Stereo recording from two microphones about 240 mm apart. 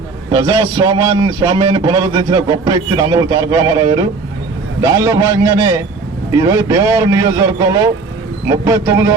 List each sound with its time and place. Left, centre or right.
0.3 s a man's voice: centre